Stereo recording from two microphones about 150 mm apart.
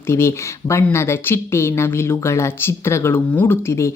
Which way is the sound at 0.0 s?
15° left (ahead or behind).